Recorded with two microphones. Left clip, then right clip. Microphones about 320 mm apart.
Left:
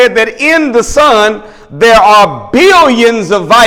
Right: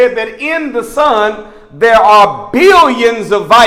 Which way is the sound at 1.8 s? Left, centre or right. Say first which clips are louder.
Left 2 dB; left.